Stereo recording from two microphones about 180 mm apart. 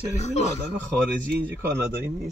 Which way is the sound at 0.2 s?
40° left (ahead or behind).